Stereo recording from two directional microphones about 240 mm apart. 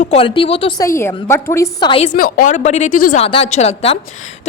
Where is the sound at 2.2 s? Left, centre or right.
Left.